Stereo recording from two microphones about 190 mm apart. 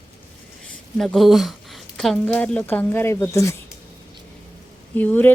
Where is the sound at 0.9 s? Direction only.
Centre (ahead or behind).